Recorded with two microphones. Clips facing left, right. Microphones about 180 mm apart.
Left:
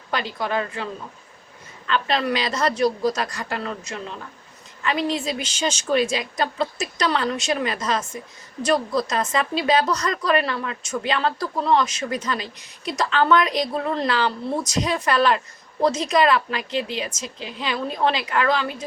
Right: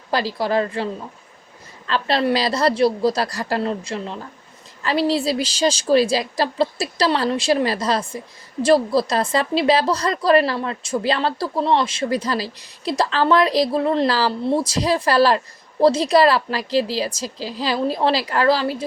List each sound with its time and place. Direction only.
0.1 s a woman's voice: 35° right (ahead or behind)
1.9 s a woman's voice: 35° right (ahead or behind)